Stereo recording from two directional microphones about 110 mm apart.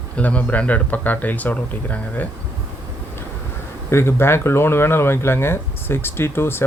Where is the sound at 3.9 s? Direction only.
25° left (ahead or behind).